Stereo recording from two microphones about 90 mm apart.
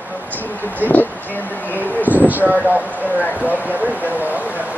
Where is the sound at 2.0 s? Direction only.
20° right (ahead or behind).